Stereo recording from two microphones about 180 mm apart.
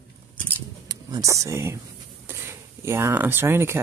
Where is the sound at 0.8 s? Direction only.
20° right (ahead or behind).